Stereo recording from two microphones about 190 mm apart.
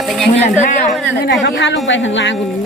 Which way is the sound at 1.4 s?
75° left (ahead or behind).